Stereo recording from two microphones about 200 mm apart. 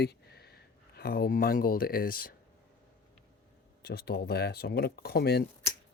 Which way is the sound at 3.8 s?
50° left (ahead or behind).